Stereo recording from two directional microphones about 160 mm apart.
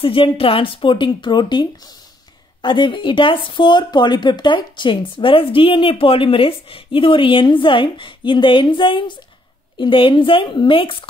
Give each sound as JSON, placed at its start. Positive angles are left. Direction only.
{"t": 0.0, "sound": "speech", "side_deg": 35}